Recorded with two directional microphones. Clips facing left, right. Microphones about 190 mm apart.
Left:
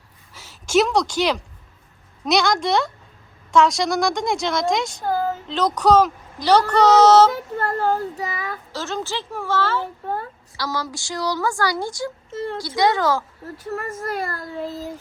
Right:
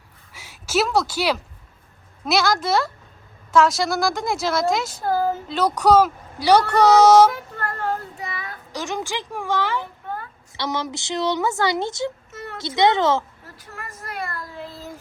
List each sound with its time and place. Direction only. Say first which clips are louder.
0.3 s a woman's voice: left 4 dB; 10° right (ahead or behind)
7.6 s child singing: left 5 dB; 35° left (ahead or behind)
8.7 s speech: right 1 dB; 15° right (ahead or behind)
9.8 s a sound: left 5 dB; 40° left (ahead or behind)
10.6 s a woman's voice: right 1 dB; 20° right (ahead or behind)
12.3 s a sound: left 8 dB; 30° left (ahead or behind)
12.6 s a woman's voice: right 2 dB; 25° right (ahead or behind)
13.7 s child singing: left 10 dB; 40° left (ahead or behind)